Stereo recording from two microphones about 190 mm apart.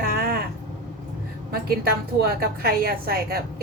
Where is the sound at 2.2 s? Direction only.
55° right (ahead or behind).